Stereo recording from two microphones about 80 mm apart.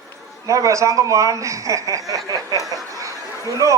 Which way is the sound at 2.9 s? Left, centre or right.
Right.